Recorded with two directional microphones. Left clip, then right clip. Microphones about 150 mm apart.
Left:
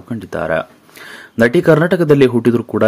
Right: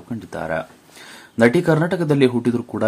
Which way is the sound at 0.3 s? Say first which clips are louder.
Left 7 dB; 25° left (ahead or behind).